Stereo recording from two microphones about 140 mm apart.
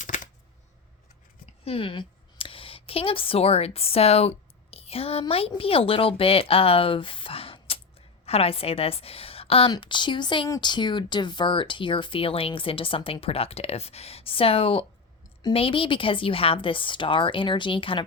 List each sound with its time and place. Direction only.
1.6 s a woman's voice: 40° left (ahead or behind)